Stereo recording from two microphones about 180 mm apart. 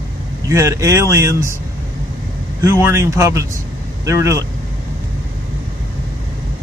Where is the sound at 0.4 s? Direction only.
15° right (ahead or behind).